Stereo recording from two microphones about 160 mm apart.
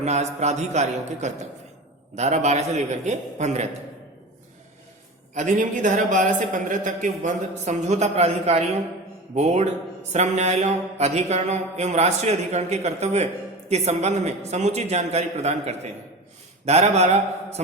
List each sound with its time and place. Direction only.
0.0 s speech: 45° right (ahead or behind)
5.3 s speech: 50° right (ahead or behind)